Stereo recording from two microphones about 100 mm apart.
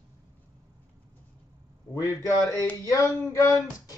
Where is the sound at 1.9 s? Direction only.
30° left (ahead or behind).